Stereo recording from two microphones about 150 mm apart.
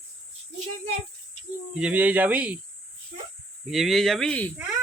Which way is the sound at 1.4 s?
45° left (ahead or behind).